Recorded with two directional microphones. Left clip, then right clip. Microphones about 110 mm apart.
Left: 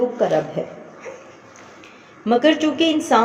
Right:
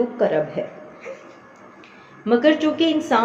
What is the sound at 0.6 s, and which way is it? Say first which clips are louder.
Speech: left 1 dB; 45° left (ahead or behind).